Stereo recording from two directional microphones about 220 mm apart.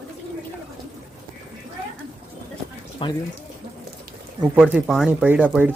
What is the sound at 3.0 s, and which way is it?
Speech, 25° left (ahead or behind).